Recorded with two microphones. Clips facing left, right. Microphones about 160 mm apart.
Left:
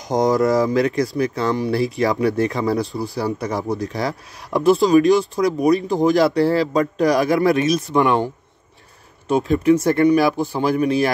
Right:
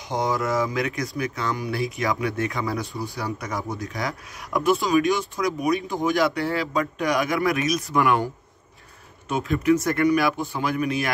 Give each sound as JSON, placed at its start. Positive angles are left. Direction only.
{"t": 0.1, "sound": "speech", "side_deg": 40}
{"t": 9.3, "sound": "speech", "side_deg": 30}